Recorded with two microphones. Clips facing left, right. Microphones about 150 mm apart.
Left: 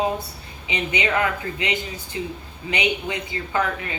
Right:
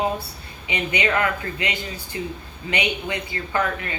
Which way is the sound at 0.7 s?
20° left (ahead or behind).